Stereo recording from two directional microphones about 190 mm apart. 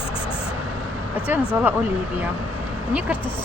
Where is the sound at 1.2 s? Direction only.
5° right (ahead or behind).